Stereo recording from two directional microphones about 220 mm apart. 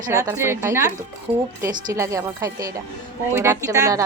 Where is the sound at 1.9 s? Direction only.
15° right (ahead or behind).